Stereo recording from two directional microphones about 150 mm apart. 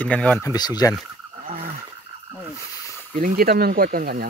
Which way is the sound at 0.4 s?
25° left (ahead or behind).